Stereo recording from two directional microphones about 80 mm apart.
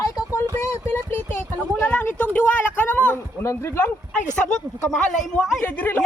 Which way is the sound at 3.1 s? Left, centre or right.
Left.